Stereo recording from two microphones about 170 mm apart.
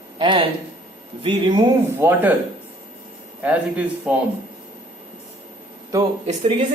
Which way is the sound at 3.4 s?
10° right (ahead or behind).